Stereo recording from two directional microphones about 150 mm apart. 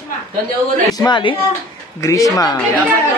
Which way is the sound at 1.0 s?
30° left (ahead or behind).